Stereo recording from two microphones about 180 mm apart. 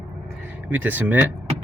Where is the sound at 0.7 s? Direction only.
10° right (ahead or behind).